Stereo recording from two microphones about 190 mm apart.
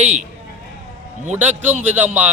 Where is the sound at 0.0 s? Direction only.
35° right (ahead or behind).